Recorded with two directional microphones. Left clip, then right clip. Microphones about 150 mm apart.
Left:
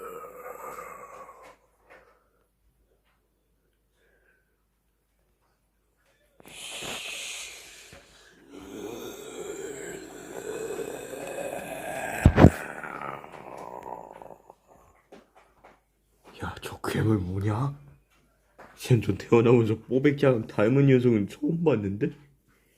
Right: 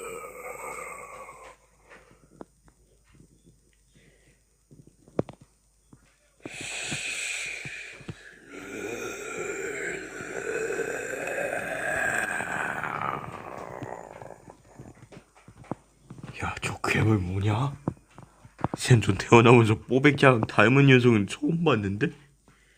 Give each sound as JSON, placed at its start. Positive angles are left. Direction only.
{"t": 0.0, "sound": "a sound", "side_deg": -20}
{"t": 6.4, "sound": "wheeze", "side_deg": -20}
{"t": 8.4, "sound": "groan", "side_deg": -20}
{"t": 16.4, "sound": "whispering", "side_deg": -5}
{"t": 17.0, "sound": "speech", "side_deg": -10}
{"t": 18.8, "sound": "speech", "side_deg": -15}